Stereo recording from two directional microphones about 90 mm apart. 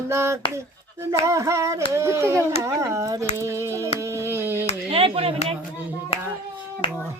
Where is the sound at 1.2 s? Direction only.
35° right (ahead or behind).